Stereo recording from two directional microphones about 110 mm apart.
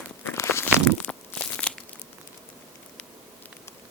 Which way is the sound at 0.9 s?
10° left (ahead or behind).